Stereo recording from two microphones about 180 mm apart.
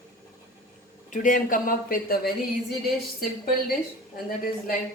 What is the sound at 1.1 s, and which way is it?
Speech, 45° left (ahead or behind).